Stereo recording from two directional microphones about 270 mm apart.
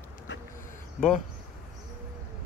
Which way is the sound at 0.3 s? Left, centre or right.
Left.